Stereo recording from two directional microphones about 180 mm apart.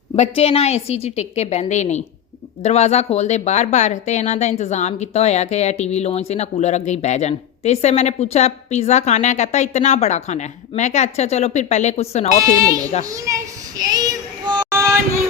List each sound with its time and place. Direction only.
0.2 s speech: 35° left (ahead or behind)
12.5 s speech: 20° right (ahead or behind)
13.1 s child singing: 20° right (ahead or behind)